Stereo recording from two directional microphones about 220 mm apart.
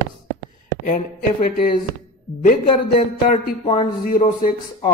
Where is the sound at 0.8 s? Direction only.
30° left (ahead or behind).